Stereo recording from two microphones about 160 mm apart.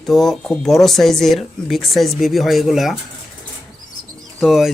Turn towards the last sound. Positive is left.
turn(degrees=0)  # may be behind; listen again after turning